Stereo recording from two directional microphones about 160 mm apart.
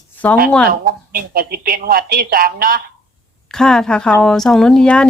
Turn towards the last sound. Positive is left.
turn(degrees=5)  # may be behind; listen again after turning